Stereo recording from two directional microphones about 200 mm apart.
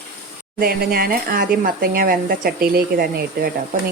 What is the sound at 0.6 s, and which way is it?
Speech, 50° right (ahead or behind).